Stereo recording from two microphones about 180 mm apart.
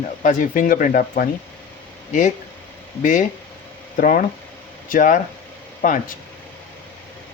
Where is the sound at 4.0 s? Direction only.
50° left (ahead or behind).